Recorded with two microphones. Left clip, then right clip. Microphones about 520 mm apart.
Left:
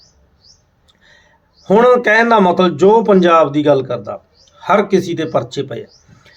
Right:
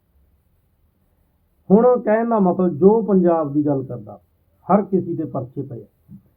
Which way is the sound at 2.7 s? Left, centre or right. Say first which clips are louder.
Left 4 dB; centre.